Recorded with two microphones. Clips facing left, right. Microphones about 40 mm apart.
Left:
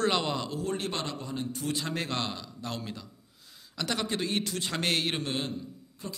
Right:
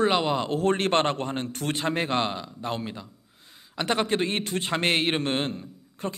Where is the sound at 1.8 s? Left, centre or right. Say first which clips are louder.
Right 11 dB; right.